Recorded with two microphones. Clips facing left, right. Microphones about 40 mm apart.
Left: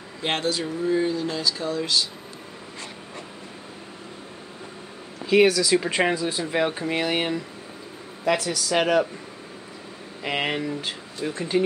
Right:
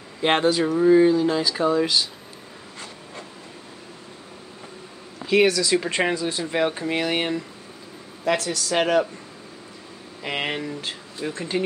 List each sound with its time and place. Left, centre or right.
0.2 s speech: centre
0.7 s speech: right
5.3 s speech: centre
10.2 s speech: centre